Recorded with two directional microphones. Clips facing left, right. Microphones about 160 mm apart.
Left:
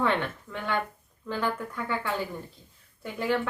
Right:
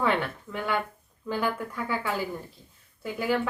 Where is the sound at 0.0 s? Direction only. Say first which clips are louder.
Right 1 dB; 5° right (ahead or behind).